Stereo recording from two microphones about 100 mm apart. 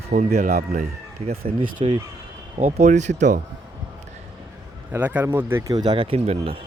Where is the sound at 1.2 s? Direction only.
75° right (ahead or behind).